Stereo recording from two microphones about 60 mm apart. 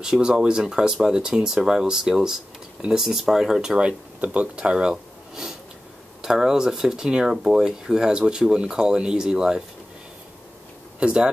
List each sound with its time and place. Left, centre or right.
0.0 s speech: centre
4.9 s a sound: centre
6.2 s speech: centre
11.0 s speech: centre